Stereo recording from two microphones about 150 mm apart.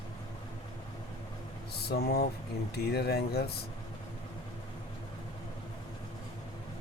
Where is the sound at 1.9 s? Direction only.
90° left.